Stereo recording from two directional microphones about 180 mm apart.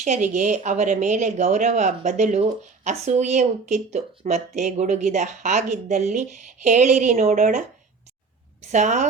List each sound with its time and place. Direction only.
0.0 s speech: 40° right (ahead or behind)
8.6 s a woman's voice: 40° right (ahead or behind)